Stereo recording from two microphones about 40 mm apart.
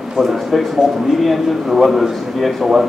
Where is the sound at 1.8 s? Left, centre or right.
Centre.